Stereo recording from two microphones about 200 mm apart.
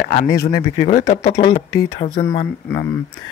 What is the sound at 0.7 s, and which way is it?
Speech, 30° left (ahead or behind).